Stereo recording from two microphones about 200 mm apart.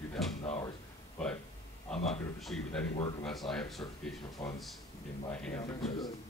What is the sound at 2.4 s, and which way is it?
Speech, 5° left (ahead or behind).